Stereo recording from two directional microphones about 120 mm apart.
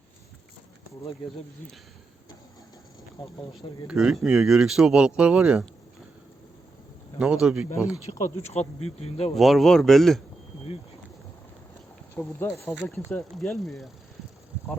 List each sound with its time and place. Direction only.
3.5 s speech: 5° right (ahead or behind)
7.2 s speech: 5° right (ahead or behind)
8.2 s speech: 65° left (ahead or behind)
9.3 s speech: centre (ahead or behind)
12.1 s speech: 20° left (ahead or behind)
13.3 s speech: centre (ahead or behind)